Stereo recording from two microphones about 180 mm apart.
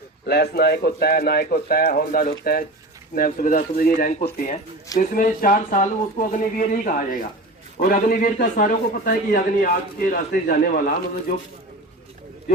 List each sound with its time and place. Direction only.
0.3 s speech: 65° left (ahead or behind)